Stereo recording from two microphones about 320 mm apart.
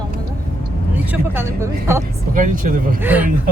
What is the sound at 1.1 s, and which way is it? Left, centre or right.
Speech, centre.